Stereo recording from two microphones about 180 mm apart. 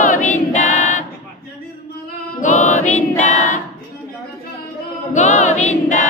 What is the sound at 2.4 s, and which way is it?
Choir, 45° left (ahead or behind).